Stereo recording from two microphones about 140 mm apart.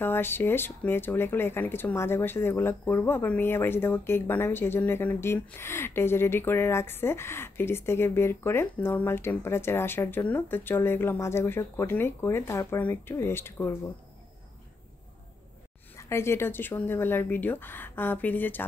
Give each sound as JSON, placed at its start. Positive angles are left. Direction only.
{"t": 0.0, "sound": "speech", "side_deg": 15}
{"t": 16.0, "sound": "speech", "side_deg": 20}